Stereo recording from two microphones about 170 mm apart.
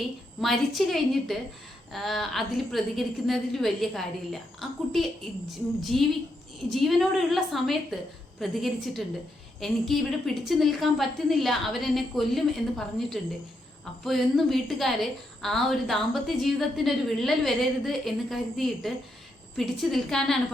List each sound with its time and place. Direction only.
0.4 s a woman's voice: centre (ahead or behind)